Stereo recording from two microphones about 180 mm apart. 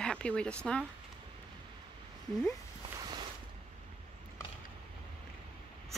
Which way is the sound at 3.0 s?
25° right (ahead or behind).